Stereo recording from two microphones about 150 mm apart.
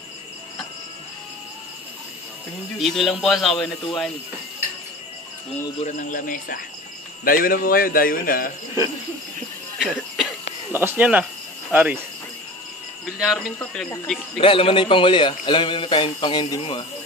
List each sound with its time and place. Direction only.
2.8 s a man's voice: centre (ahead or behind)
5.8 s speech: 55° left (ahead or behind); by 8.5 s 75° left (ahead or behind)
9.8 s cough: centre (ahead or behind)
10.7 s speech: 15° right (ahead or behind)
13.0 s speech: centre (ahead or behind)
14.4 s a man's voice: 35° left (ahead or behind)